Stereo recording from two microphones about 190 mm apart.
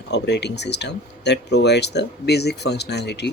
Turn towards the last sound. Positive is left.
turn(degrees=60)  # may be behind; listen again after turning